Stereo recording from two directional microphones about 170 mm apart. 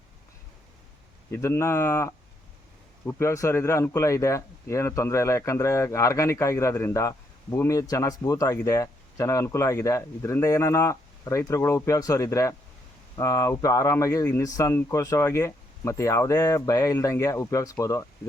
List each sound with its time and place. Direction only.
1.3 s a man's voice: 15° left (ahead or behind)